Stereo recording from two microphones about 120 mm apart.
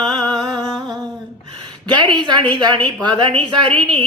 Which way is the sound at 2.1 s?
40° right (ahead or behind).